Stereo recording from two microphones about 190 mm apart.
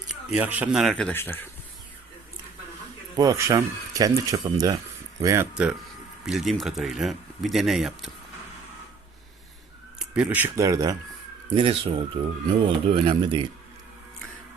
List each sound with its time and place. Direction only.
0.1 s speech: 5° right (ahead or behind); by 1.5 s 10° left (ahead or behind)
3.2 s speech: 15° right (ahead or behind)
6.2 s speech: centre (ahead or behind)
10.0 s speech: 5° right (ahead or behind)
11.5 s speech: 30° right (ahead or behind)